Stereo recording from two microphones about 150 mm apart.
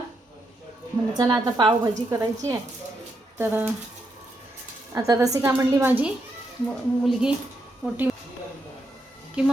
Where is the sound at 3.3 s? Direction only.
15° right (ahead or behind).